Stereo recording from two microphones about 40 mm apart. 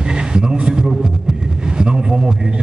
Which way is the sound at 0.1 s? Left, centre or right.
Right.